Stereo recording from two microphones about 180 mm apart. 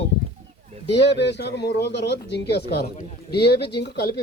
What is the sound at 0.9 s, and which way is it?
Speech, 70° left (ahead or behind).